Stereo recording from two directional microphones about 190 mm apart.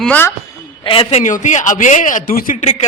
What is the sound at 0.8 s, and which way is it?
Speech, 25° left (ahead or behind).